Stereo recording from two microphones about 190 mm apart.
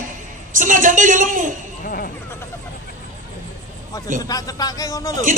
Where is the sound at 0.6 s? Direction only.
45° right (ahead or behind).